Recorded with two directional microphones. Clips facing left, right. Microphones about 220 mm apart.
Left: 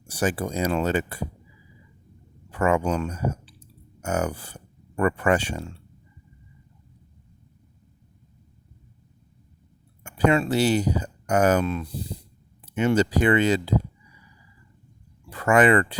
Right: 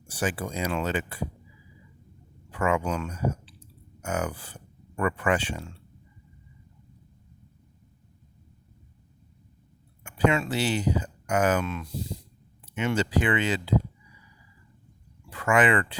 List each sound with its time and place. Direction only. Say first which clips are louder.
0.1 s speech: left 4 dB; 40° left (ahead or behind)
2.5 s speech: left 4 dB; 40° left (ahead or behind)
10.0 s speech: left 3 dB; 40° left (ahead or behind)
15.3 s speech: left 5 dB; 40° left (ahead or behind)